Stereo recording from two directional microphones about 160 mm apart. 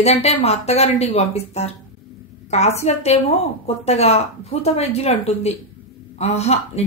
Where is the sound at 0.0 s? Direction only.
40° left (ahead or behind).